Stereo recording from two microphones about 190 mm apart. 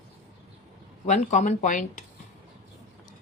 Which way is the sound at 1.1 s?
40° left (ahead or behind).